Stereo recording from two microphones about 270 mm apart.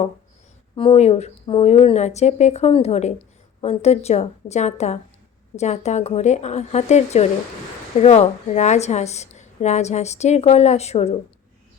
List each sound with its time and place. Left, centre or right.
0.8 s a woman's voice: left